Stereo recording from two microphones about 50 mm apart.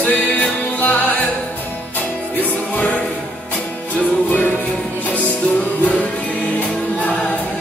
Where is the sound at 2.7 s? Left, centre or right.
Left.